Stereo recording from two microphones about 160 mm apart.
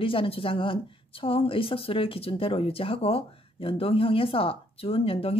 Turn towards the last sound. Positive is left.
turn(degrees=35)  # may be behind; listen again after turning